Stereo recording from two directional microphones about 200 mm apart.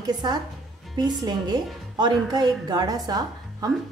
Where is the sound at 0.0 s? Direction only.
20° right (ahead or behind).